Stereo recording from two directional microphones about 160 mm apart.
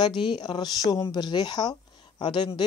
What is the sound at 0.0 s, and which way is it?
Speech, 30° left (ahead or behind).